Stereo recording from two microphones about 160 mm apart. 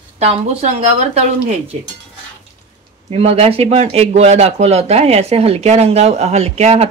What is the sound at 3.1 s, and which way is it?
Speech, 40° right (ahead or behind).